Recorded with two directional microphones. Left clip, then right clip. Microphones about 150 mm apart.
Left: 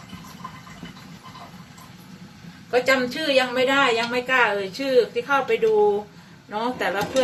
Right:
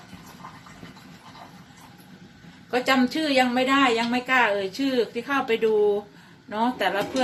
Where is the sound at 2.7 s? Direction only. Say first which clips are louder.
Left 2 dB; 50° right (ahead or behind).